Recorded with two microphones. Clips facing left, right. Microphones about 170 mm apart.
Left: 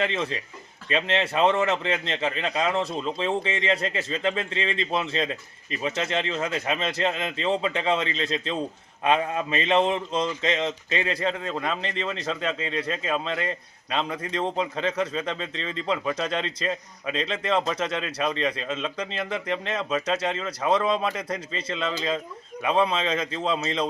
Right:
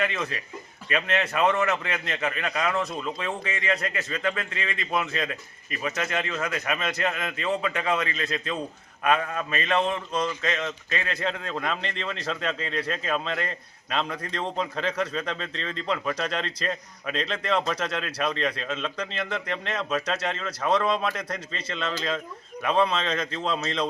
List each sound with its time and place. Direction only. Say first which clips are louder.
0.0 s speech: left 2 dB; 30° left (ahead or behind)
11.2 s speech: left 2 dB; centre (ahead or behind)